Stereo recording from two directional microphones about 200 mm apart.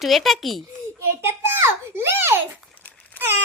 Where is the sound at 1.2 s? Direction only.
10° right (ahead or behind).